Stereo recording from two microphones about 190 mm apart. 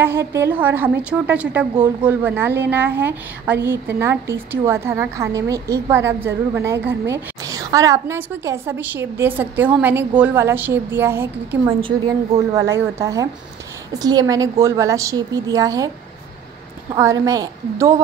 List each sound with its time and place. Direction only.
0.0 s a woman's voice: 15° right (ahead or behind)
16.9 s a woman's voice: 15° right (ahead or behind)